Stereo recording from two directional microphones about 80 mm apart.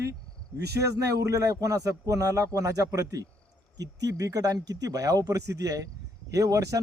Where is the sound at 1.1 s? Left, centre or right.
Right.